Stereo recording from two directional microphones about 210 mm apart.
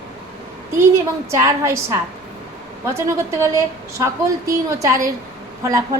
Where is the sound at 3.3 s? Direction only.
15° right (ahead or behind).